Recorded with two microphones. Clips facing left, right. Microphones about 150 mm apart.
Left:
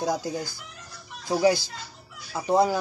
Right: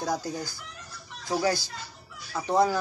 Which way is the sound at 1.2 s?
15° left (ahead or behind).